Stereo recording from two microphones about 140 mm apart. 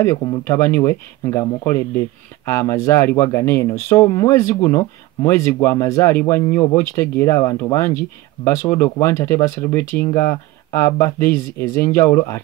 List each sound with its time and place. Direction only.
0.0 s speech: 20° left (ahead or behind)